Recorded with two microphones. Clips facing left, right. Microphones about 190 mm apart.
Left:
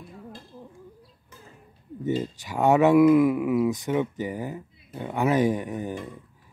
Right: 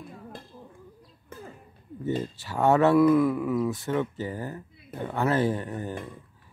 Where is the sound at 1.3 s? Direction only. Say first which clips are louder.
Right 9 dB; 55° right (ahead or behind).